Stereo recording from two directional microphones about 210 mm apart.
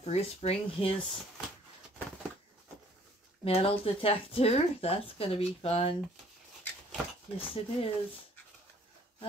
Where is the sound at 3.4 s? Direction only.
25° left (ahead or behind).